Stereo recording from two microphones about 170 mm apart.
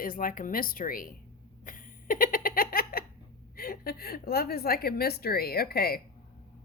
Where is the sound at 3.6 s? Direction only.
65° left (ahead or behind).